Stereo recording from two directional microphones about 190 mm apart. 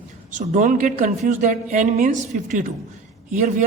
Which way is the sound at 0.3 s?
40° right (ahead or behind).